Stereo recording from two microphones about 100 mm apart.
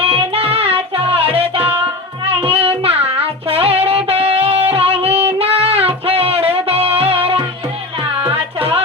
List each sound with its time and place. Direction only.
0.1 s music: 75° right (ahead or behind)
3.1 s child singing: 80° right
4.2 s music: 80° right